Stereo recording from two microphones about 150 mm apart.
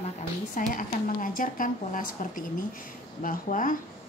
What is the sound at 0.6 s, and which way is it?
A woman's voice, 65° left (ahead or behind).